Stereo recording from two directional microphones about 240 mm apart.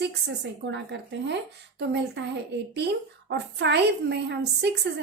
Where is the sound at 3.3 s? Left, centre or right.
Right.